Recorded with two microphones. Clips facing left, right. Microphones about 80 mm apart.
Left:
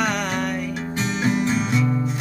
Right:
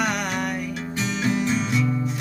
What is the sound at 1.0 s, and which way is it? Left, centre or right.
Music, left.